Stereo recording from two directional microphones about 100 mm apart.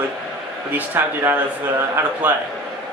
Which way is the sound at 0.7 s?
20° right (ahead or behind).